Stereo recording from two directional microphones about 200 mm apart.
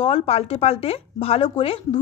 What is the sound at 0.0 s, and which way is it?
A woman's voice, 30° left (ahead or behind).